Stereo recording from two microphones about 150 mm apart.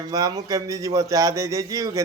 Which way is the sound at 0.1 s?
25° right (ahead or behind).